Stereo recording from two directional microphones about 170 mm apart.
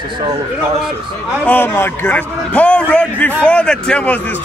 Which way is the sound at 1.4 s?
10° left (ahead or behind).